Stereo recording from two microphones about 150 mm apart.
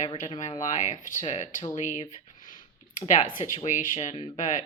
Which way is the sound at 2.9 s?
55° left (ahead or behind).